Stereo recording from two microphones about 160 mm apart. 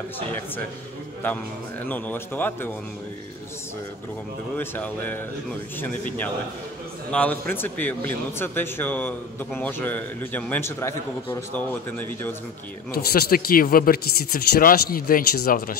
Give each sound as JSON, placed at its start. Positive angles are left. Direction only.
{"t": 1.9, "sound": "speech", "side_deg": 10}
{"t": 4.6, "sound": "speech", "side_deg": 10}
{"t": 12.9, "sound": "speech", "side_deg": 70}